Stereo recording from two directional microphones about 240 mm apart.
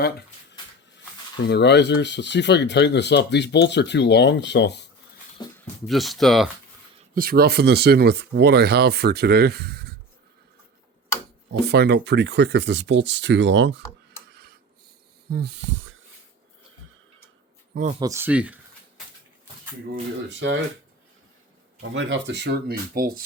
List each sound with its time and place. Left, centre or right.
1.5 s speech: left
5.5 s speech: centre
7.1 s speech: right
11.6 s speech: right
14.3 s a sound: right
15.3 s speech: right
18.0 s a sound: centre
21.8 s speech: right